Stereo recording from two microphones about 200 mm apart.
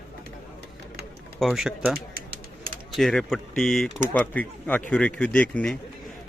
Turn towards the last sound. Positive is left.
turn(degrees=5)  # may be behind; listen again after turning